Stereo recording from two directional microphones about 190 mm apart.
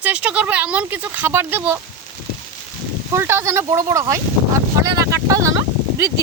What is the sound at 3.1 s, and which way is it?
Speech, 15° right (ahead or behind).